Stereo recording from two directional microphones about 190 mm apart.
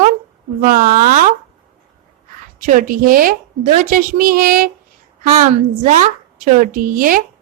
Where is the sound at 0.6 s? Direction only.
50° right (ahead or behind).